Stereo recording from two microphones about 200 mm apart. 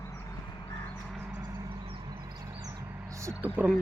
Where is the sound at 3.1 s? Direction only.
15° right (ahead or behind).